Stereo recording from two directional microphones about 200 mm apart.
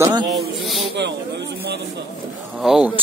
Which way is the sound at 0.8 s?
60° right (ahead or behind).